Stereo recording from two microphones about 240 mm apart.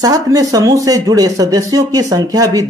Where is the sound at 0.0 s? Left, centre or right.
Centre.